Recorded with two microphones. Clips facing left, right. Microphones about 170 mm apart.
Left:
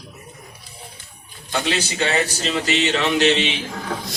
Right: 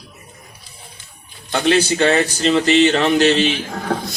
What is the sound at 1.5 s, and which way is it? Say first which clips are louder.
Speech: right 7 dB; 60° right (ahead or behind).